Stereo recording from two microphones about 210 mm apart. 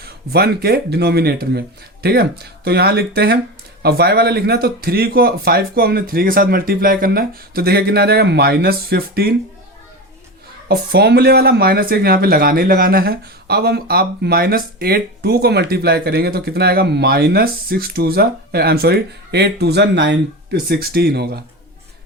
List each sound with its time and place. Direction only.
0.0 s speech: 50° right (ahead or behind)
10.7 s speech: 50° right (ahead or behind)